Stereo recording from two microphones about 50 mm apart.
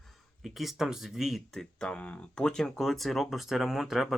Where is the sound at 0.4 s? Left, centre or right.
Centre.